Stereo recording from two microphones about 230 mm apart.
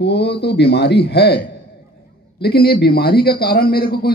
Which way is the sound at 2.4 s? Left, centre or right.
Left.